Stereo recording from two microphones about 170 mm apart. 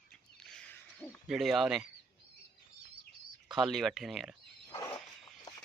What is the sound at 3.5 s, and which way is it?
Speech, centre (ahead or behind).